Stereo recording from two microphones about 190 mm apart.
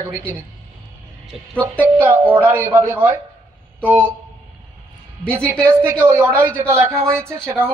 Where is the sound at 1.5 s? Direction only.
10° right (ahead or behind).